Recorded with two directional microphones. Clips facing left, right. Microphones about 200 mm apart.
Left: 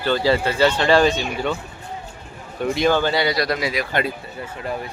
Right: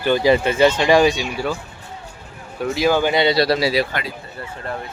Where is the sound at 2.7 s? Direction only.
5° right (ahead or behind).